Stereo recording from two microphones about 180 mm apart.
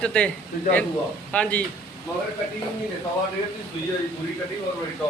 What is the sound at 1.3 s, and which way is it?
Speech, 5° left (ahead or behind).